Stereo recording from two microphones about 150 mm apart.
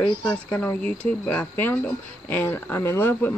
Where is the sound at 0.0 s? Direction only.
10° left (ahead or behind).